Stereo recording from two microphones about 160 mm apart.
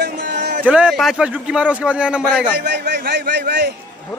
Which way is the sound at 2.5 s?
90° right.